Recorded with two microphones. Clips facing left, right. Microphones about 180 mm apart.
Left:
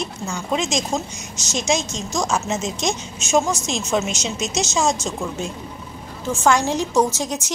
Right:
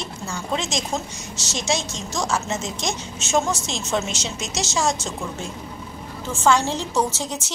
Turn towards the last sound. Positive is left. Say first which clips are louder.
# left 4 dB
turn(degrees=15)  # may be behind; listen again after turning